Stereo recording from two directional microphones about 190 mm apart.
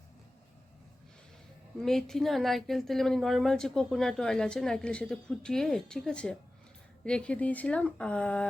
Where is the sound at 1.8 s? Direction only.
Centre (ahead or behind).